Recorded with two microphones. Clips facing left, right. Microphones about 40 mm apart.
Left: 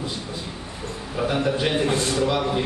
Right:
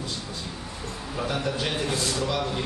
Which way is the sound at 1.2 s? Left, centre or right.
Centre.